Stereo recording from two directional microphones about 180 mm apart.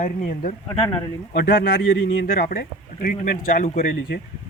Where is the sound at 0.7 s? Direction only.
20° left (ahead or behind).